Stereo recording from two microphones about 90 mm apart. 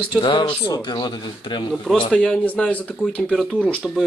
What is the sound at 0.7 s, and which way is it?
Speech, 55° left (ahead or behind).